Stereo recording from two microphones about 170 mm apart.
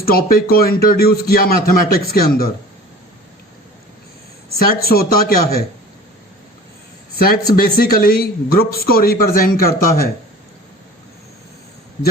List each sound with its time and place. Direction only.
0.0 s speech: 60° left (ahead or behind)
4.4 s speech: 65° left (ahead or behind)
7.5 s speech: 60° left (ahead or behind)